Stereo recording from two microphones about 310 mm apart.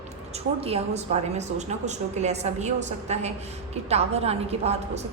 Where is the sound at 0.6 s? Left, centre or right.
Centre.